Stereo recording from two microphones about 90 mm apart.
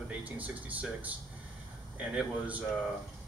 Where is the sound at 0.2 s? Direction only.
15° right (ahead or behind).